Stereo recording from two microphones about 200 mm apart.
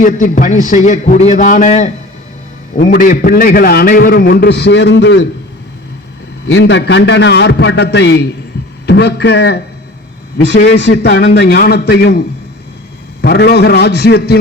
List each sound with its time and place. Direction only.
0.0 s a man's voice: 40° left (ahead or behind); by 5.2 s 60° left (ahead or behind)
6.5 s a man's voice: 60° left (ahead or behind)
13.2 s a man's voice: 55° left (ahead or behind)